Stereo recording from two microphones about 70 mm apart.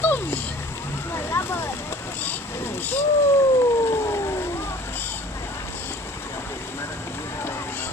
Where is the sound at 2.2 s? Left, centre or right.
Left.